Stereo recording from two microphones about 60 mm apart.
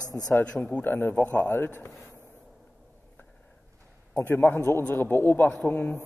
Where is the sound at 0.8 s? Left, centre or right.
Left.